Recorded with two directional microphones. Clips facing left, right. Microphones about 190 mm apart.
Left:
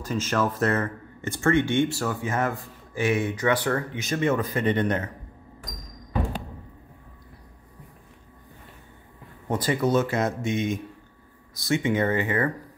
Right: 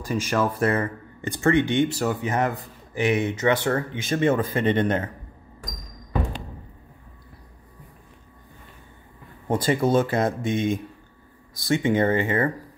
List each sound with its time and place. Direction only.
0.0 s speech: 15° right (ahead or behind)
9.5 s speech: 30° right (ahead or behind)